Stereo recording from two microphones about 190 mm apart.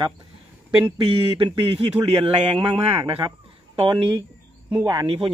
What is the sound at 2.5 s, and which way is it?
A man's voice, 25° right (ahead or behind).